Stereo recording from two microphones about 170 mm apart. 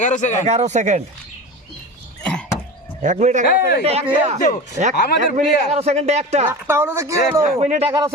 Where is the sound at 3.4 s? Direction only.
65° left (ahead or behind).